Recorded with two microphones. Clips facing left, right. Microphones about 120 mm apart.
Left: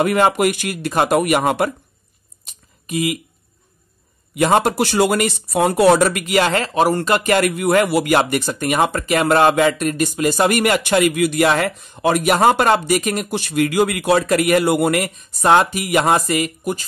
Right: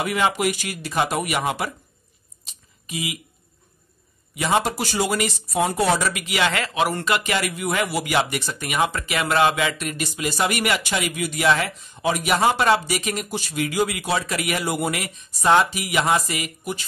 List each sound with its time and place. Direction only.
0.0 s a man's voice: 50° left (ahead or behind)
2.4 s a sound: 55° left (ahead or behind)
4.4 s speech: 50° left (ahead or behind)
13.3 s a man's voice: 60° left (ahead or behind); by 16.8 s 45° left (ahead or behind)